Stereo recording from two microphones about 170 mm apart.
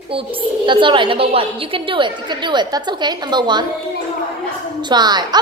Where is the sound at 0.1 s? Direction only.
30° right (ahead or behind).